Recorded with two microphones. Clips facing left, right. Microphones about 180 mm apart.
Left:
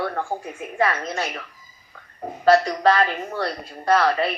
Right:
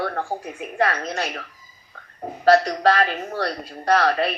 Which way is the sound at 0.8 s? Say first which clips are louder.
Even; 65° right (ahead or behind).